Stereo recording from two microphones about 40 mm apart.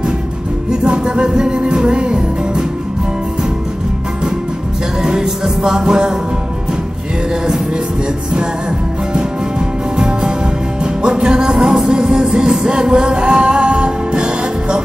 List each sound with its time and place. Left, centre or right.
0.7 s music: centre
5.0 s music: centre
9.9 s music: right